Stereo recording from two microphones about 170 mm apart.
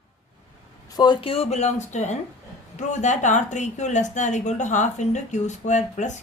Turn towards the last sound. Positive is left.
turn(degrees=45)  # may be behind; listen again after turning